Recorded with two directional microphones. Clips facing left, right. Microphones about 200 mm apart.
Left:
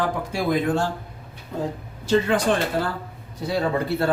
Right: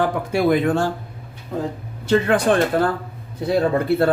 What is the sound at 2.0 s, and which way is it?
Speech, 55° right (ahead or behind).